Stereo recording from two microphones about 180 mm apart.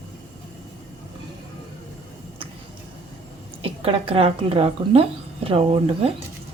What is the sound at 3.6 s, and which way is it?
Speech, 30° right (ahead or behind).